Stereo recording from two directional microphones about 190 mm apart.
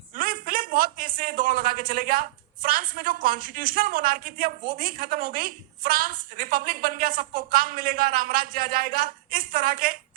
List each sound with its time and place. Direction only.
0.2 s a man's voice: 50° right (ahead or behind)